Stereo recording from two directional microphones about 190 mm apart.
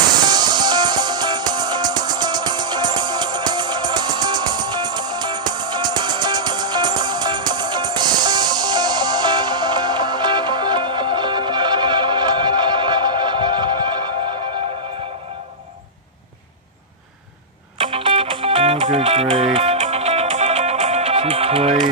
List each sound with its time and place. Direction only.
0.2 s music: 20° right (ahead or behind)
17.9 s music: 25° right (ahead or behind)